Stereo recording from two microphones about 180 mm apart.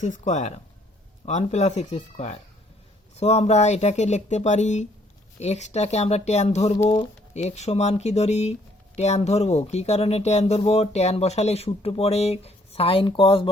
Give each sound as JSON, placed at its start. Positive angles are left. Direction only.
{"t": 0.0, "sound": "speech", "side_deg": 40}